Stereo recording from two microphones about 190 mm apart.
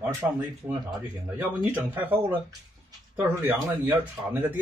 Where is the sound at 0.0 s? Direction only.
10° right (ahead or behind).